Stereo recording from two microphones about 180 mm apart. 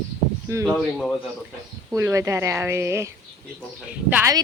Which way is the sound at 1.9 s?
15° right (ahead or behind).